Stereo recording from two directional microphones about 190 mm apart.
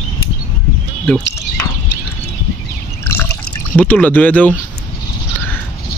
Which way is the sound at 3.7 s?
10° left (ahead or behind).